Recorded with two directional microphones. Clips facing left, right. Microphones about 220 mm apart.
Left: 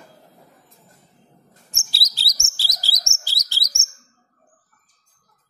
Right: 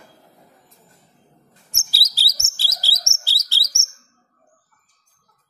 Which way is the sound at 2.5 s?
15° left (ahead or behind).